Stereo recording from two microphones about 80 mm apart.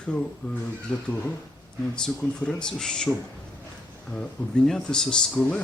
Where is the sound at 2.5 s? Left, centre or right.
Centre.